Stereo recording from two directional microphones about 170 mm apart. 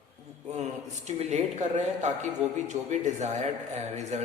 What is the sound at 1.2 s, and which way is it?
A man's voice, 40° right (ahead or behind).